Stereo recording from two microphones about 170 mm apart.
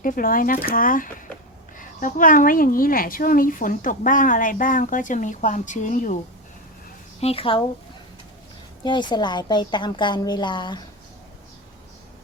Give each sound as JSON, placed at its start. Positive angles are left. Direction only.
{"t": 0.0, "sound": "a woman's voice", "side_deg": 55}
{"t": 7.2, "sound": "a woman's voice", "side_deg": 35}
{"t": 8.8, "sound": "a woman's voice", "side_deg": 25}